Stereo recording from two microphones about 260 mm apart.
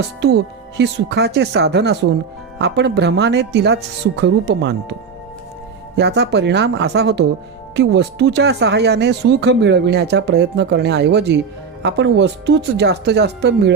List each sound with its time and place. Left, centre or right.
0.2 s speech: right
6.0 s speech: right